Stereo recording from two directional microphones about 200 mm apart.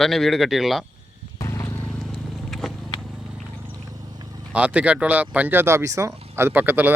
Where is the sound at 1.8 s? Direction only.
Centre (ahead or behind).